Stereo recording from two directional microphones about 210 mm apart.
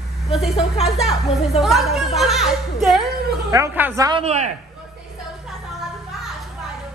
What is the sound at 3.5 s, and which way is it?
Speech, 15° right (ahead or behind).